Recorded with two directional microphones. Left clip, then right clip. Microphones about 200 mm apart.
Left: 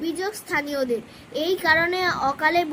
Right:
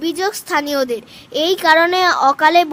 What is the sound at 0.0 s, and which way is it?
A child's voice, 60° right (ahead or behind).